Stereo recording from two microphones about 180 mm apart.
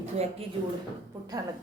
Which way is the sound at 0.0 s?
35° right (ahead or behind).